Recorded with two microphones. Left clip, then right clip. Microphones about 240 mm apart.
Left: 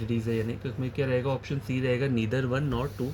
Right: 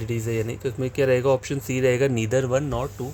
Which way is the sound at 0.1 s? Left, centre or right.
Right.